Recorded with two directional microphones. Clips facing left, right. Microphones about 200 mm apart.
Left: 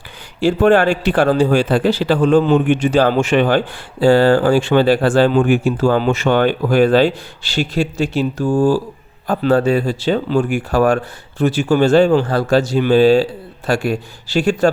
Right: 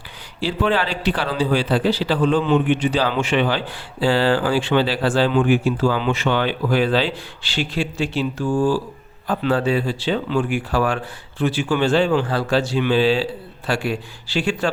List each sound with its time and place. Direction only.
0.3 s speech: 50° left (ahead or behind)